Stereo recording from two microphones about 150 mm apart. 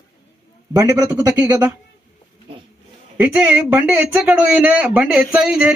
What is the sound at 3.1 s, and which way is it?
A man's voice, 10° right (ahead or behind).